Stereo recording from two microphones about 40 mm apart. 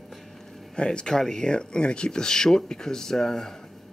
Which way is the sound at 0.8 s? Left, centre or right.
Left.